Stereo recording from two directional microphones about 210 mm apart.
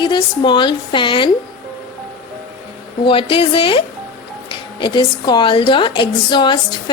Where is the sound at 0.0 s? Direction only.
20° left (ahead or behind).